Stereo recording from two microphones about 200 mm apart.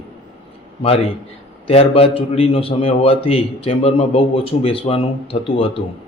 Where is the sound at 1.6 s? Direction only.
30° left (ahead or behind).